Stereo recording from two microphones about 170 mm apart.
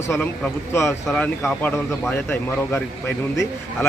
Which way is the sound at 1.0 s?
5° left (ahead or behind).